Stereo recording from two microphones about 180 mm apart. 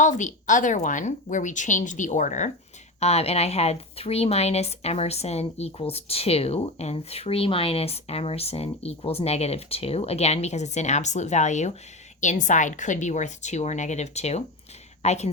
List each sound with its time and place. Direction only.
0.0 s a woman's voice: 45° left (ahead or behind)